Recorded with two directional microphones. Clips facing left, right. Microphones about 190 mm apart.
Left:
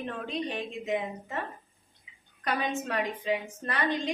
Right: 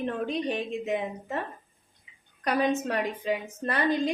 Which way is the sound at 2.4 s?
40° right (ahead or behind).